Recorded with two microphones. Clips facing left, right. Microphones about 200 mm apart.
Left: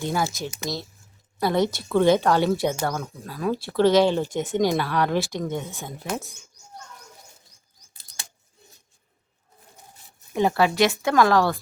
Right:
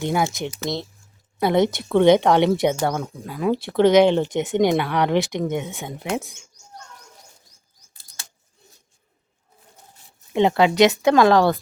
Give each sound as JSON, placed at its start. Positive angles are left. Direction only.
{"t": 0.0, "sound": "speech", "side_deg": -20}
{"t": 10.3, "sound": "speech", "side_deg": -20}